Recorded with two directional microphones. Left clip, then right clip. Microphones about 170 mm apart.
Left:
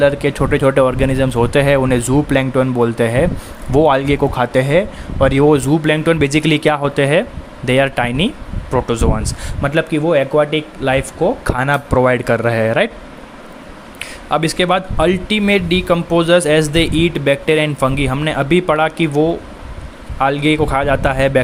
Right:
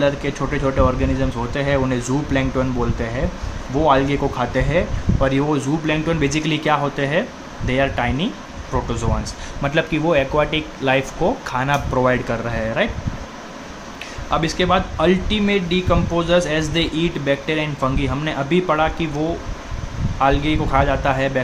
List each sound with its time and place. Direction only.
0.0 s speech: 50° left (ahead or behind)
14.0 s speech: 50° left (ahead or behind)
20.1 s speech: 50° left (ahead or behind)